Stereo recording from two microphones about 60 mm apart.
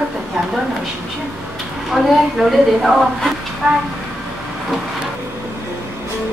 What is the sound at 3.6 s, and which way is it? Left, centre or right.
Speech, centre.